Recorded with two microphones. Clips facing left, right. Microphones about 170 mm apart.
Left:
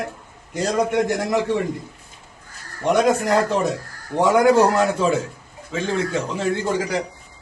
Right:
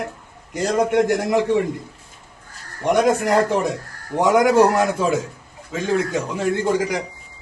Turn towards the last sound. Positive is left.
turn(degrees=-10)  # may be behind; listen again after turning